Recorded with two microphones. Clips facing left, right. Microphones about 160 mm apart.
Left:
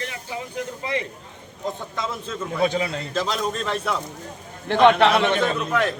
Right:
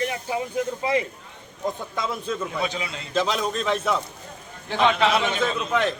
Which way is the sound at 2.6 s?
45° left (ahead or behind).